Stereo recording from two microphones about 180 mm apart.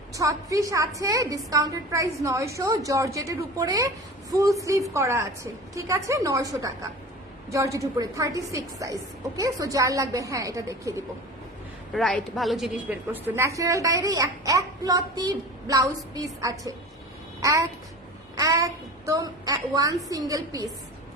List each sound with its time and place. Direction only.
0.2 s a woman's voice: 20° right (ahead or behind)
11.9 s a woman's voice: 5° left (ahead or behind); by 20.7 s 20° right (ahead or behind)